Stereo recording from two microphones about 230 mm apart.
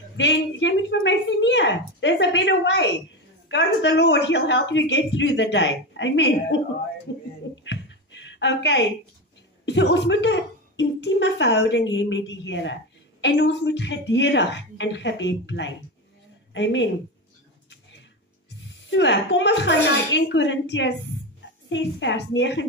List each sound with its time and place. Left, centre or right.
0.2 s a woman's voice: left
7.1 s a sound: left
9.7 s a woman's voice: left
18.9 s a woman's voice: left